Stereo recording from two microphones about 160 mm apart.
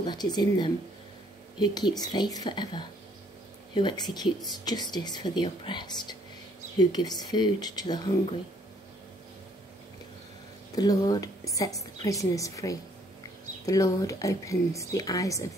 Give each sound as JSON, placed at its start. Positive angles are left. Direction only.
{"t": 0.0, "sound": "a woman's voice", "side_deg": 25}
{"t": 10.8, "sound": "a woman's voice", "side_deg": 25}